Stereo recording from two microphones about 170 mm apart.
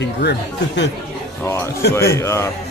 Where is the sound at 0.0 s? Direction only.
85° left.